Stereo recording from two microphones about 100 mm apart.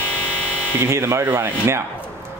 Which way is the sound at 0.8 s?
25° right (ahead or behind).